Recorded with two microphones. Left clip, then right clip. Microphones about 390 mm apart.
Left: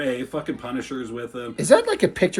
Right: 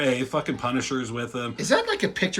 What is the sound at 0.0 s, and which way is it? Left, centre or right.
Speech, right.